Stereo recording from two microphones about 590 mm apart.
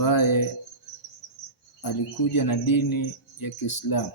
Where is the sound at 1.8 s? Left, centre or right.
Left.